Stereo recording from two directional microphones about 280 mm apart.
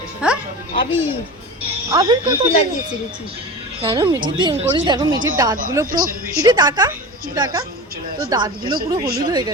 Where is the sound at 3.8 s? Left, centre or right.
Centre.